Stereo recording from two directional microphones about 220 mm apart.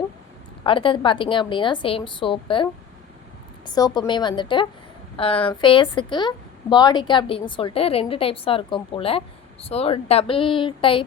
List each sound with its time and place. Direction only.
0.6 s a woman's voice: 25° left (ahead or behind)
3.7 s a woman's voice: 20° left (ahead or behind)